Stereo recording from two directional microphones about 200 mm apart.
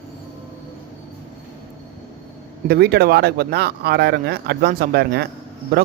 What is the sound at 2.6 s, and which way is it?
Speech, 55° right (ahead or behind).